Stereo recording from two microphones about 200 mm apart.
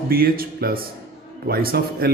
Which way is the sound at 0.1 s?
50° right (ahead or behind).